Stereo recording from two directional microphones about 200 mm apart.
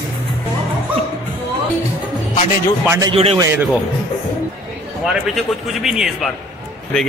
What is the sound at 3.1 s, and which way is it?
Speech, 30° right (ahead or behind).